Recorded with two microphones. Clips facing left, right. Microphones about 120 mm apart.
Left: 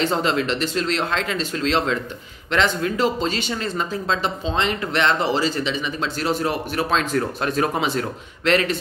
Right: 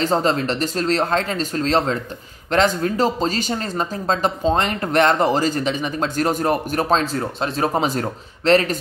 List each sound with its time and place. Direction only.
0.0 s speech: 40° right (ahead or behind)